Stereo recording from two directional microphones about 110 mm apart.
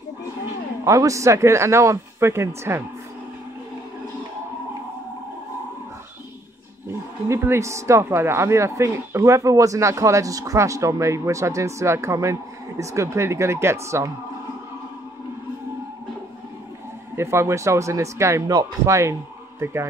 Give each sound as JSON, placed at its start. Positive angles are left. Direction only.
{"t": 0.8, "sound": "speech", "side_deg": -30}
{"t": 7.2, "sound": "speech", "side_deg": -20}
{"t": 17.1, "sound": "speech", "side_deg": -25}